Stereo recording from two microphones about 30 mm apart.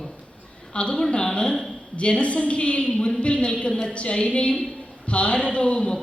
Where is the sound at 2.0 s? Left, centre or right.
Left.